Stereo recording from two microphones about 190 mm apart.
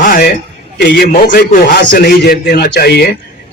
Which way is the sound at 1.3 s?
45° left (ahead or behind).